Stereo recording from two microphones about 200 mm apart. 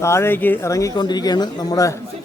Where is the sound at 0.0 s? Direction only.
15° left (ahead or behind).